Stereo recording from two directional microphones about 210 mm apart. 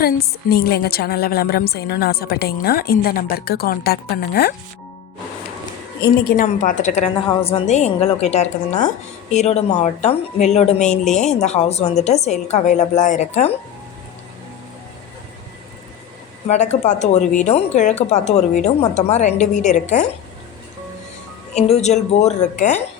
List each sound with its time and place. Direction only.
0.0 s a woman's voice: 50° left (ahead or behind)
6.0 s a woman's voice: 45° left (ahead or behind)
16.5 s a woman's voice: 35° left (ahead or behind)
21.5 s a woman's voice: 30° left (ahead or behind)